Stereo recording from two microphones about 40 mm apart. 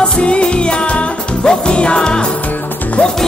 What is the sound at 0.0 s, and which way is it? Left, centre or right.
Music, left.